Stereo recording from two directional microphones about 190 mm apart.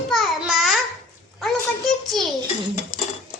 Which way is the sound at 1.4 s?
Centre (ahead or behind).